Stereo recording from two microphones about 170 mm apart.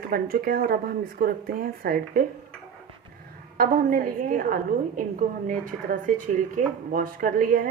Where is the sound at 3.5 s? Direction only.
55° right (ahead or behind).